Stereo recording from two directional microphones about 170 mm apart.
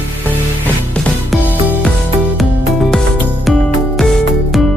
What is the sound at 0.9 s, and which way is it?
Music, 5° left (ahead or behind).